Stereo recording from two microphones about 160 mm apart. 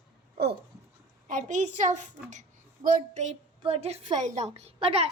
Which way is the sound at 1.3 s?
55° right (ahead or behind).